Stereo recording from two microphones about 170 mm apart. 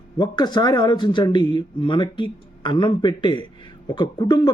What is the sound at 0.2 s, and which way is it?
Speech, 25° left (ahead or behind).